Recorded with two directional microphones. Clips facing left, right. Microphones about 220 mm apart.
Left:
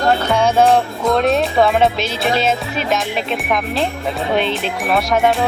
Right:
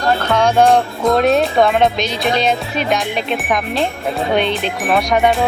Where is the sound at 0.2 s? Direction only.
10° left (ahead or behind).